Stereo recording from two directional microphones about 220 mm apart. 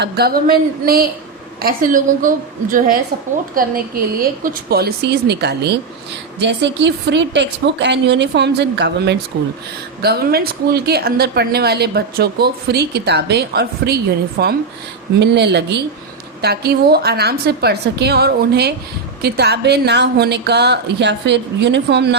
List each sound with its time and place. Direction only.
0.0 s a woman's voice: 45° right (ahead or behind)